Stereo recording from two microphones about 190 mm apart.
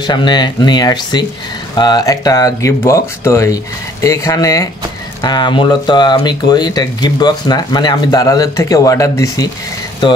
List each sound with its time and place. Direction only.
0.0 s speech: 25° left (ahead or behind)